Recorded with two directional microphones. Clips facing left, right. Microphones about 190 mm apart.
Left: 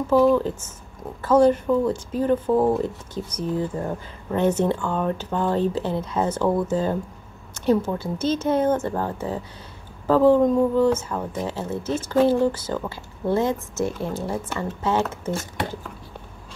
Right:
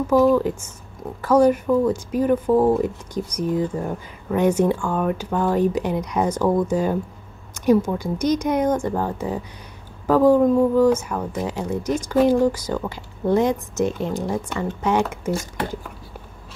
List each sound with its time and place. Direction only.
0.1 s speech: 10° right (ahead or behind)